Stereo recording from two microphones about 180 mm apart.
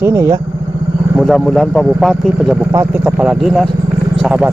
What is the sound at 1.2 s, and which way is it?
Speech, centre (ahead or behind).